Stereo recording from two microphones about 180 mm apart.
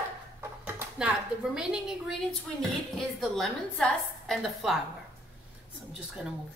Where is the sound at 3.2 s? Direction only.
5° left (ahead or behind).